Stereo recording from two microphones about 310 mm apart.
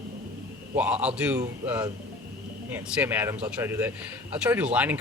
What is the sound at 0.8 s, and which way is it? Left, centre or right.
Speech, centre.